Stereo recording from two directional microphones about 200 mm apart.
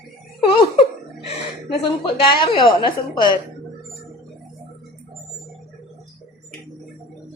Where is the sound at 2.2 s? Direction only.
25° left (ahead or behind).